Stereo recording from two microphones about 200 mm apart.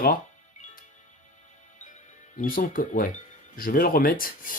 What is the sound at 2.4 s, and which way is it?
Speech, 45° left (ahead or behind).